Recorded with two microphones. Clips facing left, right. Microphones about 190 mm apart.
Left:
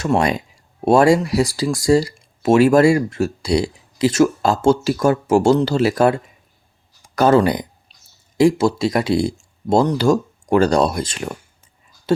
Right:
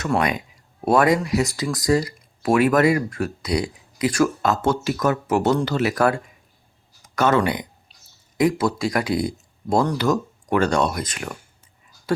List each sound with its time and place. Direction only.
0.0 s speech: 30° left (ahead or behind)